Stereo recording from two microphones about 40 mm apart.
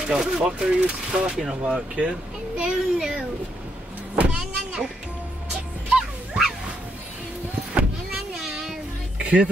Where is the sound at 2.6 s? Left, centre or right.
Centre.